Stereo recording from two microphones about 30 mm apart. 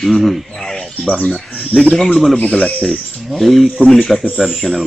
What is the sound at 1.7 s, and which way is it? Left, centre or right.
Speech, right.